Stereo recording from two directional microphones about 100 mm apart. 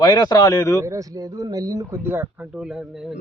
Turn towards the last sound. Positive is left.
turn(degrees=-5)  # may be behind; listen again after turning